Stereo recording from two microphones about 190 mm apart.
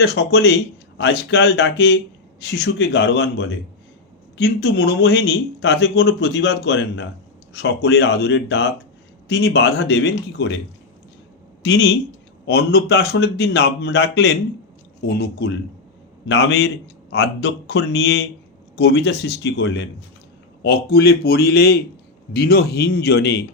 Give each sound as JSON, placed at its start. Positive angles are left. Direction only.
{"t": 0.0, "sound": "a man's voice", "side_deg": 65}
{"t": 11.6, "sound": "a man's voice", "side_deg": 65}